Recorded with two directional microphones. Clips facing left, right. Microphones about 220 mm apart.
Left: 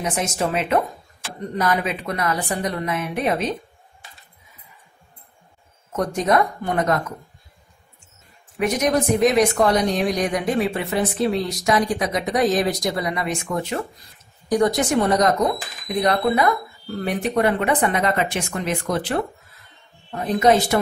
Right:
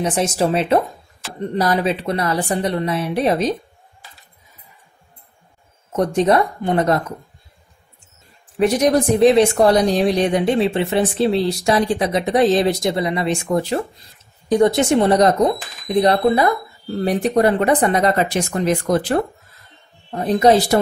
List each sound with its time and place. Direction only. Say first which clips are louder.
0.0 s speech: right 5 dB; 30° right (ahead or behind)
5.9 s speech: right 4 dB; 30° right (ahead or behind)
8.5 s speech: right 5 dB; 30° right (ahead or behind)
20.1 s speech: right 3 dB; 30° right (ahead or behind)